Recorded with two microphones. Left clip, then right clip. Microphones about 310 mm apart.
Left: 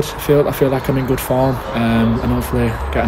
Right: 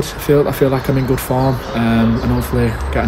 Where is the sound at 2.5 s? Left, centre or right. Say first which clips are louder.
Even; centre.